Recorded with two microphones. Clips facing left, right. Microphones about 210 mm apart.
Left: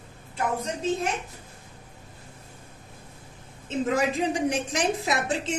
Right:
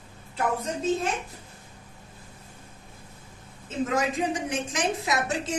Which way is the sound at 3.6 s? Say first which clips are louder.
Left 2 dB; 35° left (ahead or behind).